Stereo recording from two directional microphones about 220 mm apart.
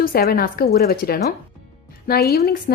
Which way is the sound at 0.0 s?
45° left (ahead or behind).